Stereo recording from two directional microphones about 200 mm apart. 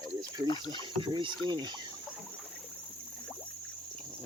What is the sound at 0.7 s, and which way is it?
Speech, 25° right (ahead or behind).